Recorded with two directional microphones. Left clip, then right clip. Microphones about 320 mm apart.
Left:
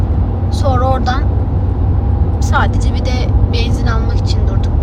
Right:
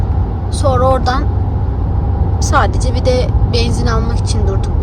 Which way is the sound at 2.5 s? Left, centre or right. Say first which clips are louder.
Right 3 dB; centre.